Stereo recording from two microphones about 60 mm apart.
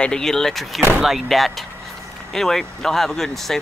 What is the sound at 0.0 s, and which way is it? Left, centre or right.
Speech, centre.